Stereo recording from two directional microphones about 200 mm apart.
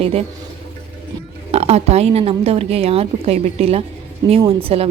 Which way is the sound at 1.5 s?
30° right (ahead or behind).